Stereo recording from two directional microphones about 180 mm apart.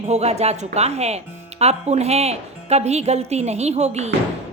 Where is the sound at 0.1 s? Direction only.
35° right (ahead or behind).